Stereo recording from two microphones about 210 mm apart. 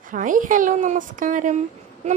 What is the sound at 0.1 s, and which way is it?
A woman's voice, 40° right (ahead or behind).